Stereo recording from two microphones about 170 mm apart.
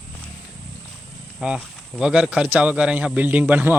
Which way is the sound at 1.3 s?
5° right (ahead or behind).